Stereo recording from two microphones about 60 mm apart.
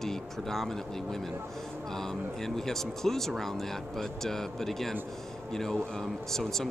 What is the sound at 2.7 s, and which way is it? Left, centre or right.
Speech, centre.